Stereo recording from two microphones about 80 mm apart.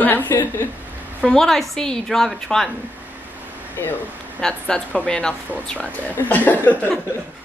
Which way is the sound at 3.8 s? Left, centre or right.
Left.